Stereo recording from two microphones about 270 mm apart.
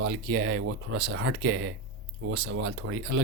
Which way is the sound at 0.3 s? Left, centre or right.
Right.